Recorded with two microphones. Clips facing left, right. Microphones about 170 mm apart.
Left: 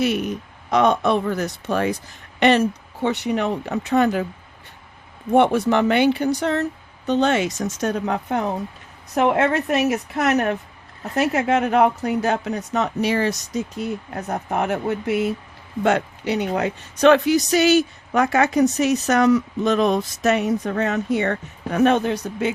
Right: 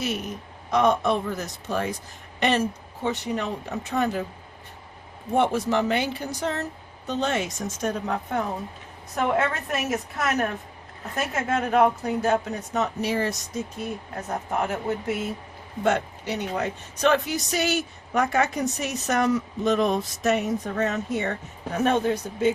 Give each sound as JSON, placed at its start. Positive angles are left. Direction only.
{"t": 0.0, "sound": "a woman's voice", "side_deg": 65}
{"t": 5.3, "sound": "a woman's voice", "side_deg": 65}